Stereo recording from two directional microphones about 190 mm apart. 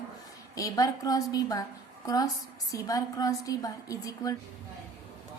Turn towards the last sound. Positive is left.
turn(degrees=20)  # may be behind; listen again after turning